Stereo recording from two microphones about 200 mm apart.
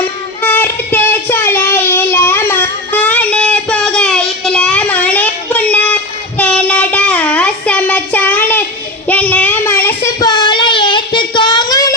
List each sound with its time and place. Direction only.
0.4 s child singing: 10° left (ahead or behind)